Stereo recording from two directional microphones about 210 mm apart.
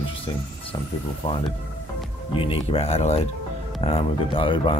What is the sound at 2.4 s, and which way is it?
Speech, 25° left (ahead or behind).